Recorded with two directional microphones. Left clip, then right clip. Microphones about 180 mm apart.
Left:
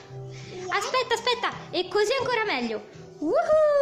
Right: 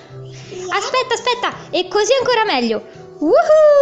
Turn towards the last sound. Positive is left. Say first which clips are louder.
# right 11 dB
turn(degrees=-25)  # may be behind; listen again after turning